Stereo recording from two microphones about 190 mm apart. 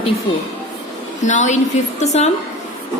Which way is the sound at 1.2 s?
40° left (ahead or behind).